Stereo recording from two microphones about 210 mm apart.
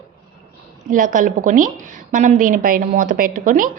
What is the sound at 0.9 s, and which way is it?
A woman's voice, 40° right (ahead or behind).